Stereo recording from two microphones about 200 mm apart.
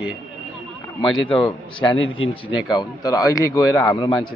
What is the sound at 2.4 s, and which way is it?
A man's voice, 20° left (ahead or behind).